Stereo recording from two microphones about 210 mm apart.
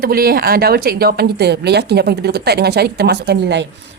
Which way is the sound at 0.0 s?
45° right (ahead or behind).